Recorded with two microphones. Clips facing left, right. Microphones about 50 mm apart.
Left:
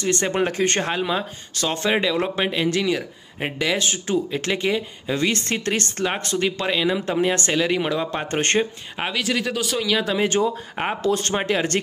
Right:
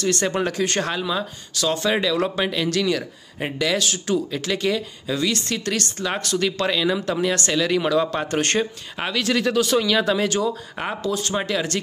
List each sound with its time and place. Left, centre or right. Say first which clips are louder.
0.0 s speech: even; left
2.0 s speech: even; left
5.1 s speech: left 1 dB; left; by 8.3 s centre
8.3 s speech: left 1 dB; left
9.0 s speech: right 2 dB; centre
10.1 s speech: left 1 dB; left
11.0 s speech: left 4 dB; left
11.3 s speech: left 2 dB; left